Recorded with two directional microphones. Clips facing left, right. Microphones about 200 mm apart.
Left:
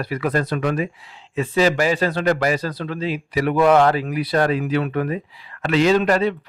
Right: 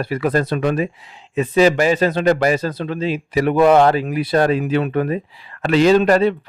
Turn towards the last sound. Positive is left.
turn(degrees=-35)  # may be behind; listen again after turning